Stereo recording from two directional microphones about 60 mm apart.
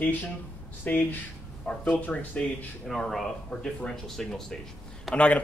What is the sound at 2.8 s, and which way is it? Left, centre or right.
Speech, centre.